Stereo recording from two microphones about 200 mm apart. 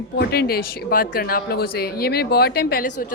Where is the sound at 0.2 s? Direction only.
50° left (ahead or behind).